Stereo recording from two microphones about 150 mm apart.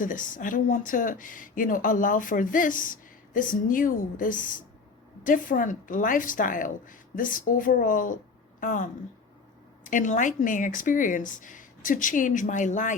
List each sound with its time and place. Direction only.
0.0 s speech: 60° left (ahead or behind)